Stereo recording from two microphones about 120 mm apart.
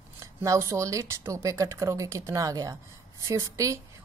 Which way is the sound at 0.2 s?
25° right (ahead or behind).